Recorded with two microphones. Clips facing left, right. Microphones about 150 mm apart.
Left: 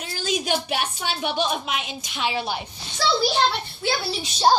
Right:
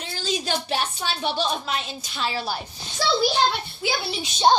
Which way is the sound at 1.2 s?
35° right (ahead or behind).